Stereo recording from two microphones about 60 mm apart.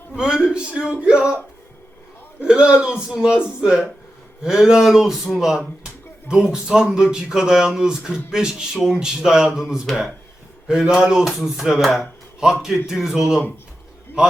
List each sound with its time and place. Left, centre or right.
0.2 s speech: centre
2.4 s speech: centre